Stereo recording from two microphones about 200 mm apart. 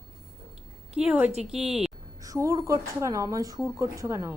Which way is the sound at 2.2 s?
15° right (ahead or behind).